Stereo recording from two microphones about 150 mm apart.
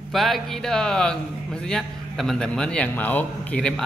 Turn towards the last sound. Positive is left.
turn(degrees=5)  # may be behind; listen again after turning